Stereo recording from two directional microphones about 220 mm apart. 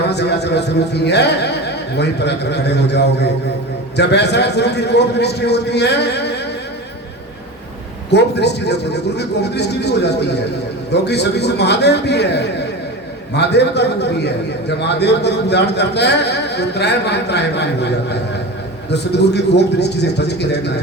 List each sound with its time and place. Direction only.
0.1 s a man's voice: 50° left (ahead or behind)
8.1 s a man's voice: 50° left (ahead or behind)
18.9 s a man's voice: 50° left (ahead or behind)